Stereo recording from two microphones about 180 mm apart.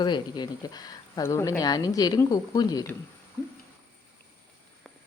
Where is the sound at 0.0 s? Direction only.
25° left (ahead or behind).